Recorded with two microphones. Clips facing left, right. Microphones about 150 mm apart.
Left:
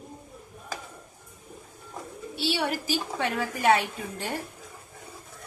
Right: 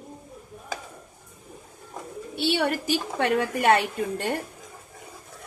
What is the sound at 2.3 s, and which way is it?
A woman's voice, 55° right (ahead or behind).